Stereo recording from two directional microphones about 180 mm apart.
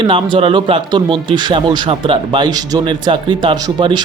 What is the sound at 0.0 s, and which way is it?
Speech, 25° right (ahead or behind).